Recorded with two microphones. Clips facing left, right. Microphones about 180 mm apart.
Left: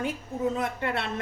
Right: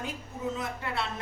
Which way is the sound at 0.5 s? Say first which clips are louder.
Left 4 dB; 60° left (ahead or behind).